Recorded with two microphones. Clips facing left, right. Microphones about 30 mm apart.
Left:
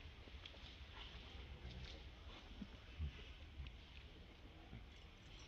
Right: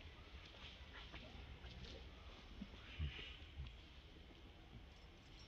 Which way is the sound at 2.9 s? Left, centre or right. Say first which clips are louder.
Right 5 dB; right.